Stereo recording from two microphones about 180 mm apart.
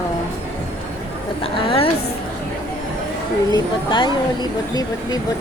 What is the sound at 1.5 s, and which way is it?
Speech, 30° left (ahead or behind).